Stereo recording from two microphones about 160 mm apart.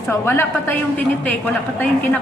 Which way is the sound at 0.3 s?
10° left (ahead or behind).